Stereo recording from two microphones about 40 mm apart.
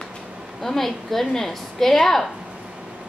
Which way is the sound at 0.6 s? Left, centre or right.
Centre.